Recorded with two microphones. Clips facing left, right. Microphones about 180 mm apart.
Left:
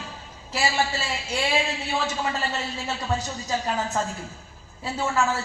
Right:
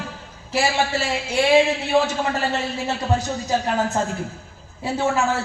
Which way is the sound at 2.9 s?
60° right (ahead or behind).